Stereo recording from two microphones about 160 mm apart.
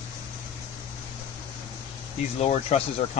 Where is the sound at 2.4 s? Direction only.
40° left (ahead or behind).